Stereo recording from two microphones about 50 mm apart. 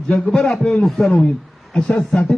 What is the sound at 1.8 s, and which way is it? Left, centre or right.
Speech, centre.